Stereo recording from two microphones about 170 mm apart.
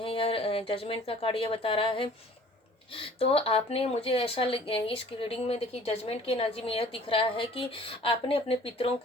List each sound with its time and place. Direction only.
0.0 s speech: 35° left (ahead or behind)